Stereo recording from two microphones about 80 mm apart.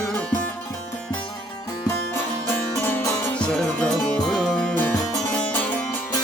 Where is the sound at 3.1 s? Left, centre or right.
Centre.